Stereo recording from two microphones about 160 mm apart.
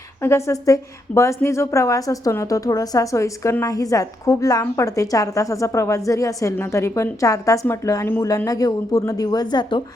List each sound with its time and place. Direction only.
0.2 s a woman's voice: 15° left (ahead or behind)